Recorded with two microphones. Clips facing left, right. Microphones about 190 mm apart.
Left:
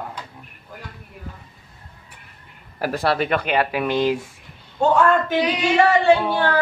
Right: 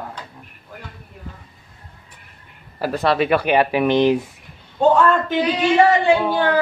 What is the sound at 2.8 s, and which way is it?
Speech, 10° left (ahead or behind).